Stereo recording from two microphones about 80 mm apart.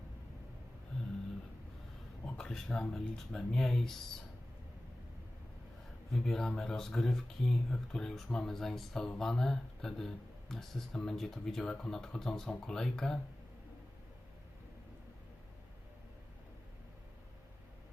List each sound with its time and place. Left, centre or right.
2.2 s speech: centre
6.1 s speech: centre